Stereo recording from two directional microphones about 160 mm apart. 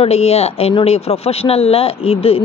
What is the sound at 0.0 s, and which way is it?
A woman's voice, 40° left (ahead or behind).